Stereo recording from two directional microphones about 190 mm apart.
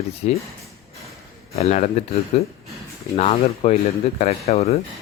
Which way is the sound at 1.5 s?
35° left (ahead or behind).